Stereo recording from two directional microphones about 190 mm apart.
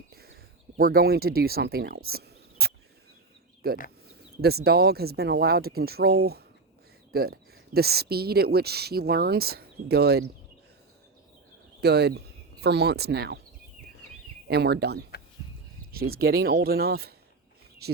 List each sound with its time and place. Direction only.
0.1 s a sound: 55° right (ahead or behind)
0.8 s speech: 50° right (ahead or behind)
2.0 s cricket: 55° right (ahead or behind)
3.6 s speech: 55° right (ahead or behind)
11.8 s speech: 60° right (ahead or behind)
14.4 s speech: 60° right (ahead or behind)